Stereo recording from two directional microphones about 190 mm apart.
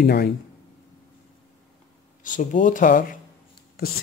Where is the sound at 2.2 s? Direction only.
45° left (ahead or behind).